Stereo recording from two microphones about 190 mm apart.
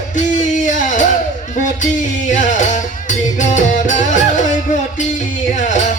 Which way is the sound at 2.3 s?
40° left (ahead or behind).